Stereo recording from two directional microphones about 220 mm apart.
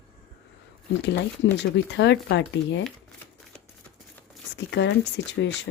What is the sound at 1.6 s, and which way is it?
Speech, 50° left (ahead or behind).